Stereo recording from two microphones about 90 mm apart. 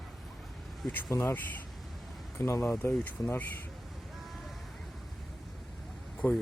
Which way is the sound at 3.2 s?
40° left (ahead or behind).